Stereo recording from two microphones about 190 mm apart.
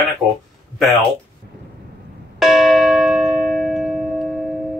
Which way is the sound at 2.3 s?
Centre (ahead or behind).